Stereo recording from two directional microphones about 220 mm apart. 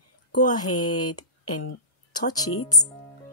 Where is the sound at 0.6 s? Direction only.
90° left.